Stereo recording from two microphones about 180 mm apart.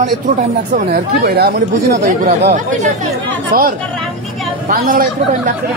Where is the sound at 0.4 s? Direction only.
55° right (ahead or behind).